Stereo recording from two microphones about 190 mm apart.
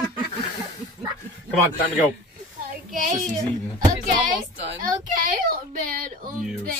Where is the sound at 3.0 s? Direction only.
40° right (ahead or behind).